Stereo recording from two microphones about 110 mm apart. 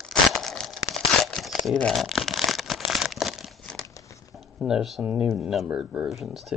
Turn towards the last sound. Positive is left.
turn(degrees=0)  # may be behind; listen again after turning